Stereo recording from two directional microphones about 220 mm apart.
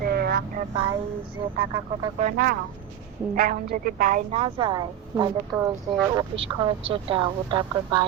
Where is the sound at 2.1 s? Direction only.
40° right (ahead or behind); by 5.3 s 20° right (ahead or behind).